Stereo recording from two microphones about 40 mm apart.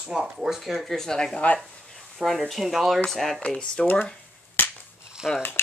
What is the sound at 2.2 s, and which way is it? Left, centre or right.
Speech, right.